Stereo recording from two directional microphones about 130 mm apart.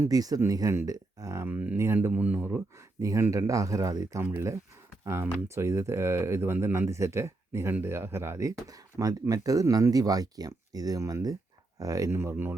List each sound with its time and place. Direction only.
0.0 s speech: 30° right (ahead or behind)